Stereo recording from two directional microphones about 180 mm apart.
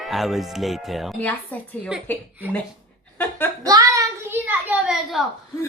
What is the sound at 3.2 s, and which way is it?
Speech, 10° left (ahead or behind).